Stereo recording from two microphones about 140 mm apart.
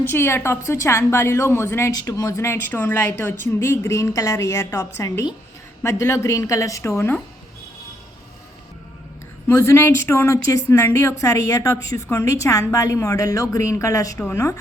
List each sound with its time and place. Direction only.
0.1 s a woman's voice: 15° left (ahead or behind)
9.5 s a woman's voice: 20° left (ahead or behind)